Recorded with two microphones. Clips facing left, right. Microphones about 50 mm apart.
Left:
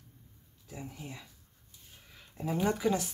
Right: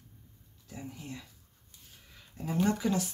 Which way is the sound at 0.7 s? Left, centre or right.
Centre.